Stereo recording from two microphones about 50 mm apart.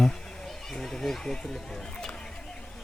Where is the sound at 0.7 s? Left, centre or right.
Centre.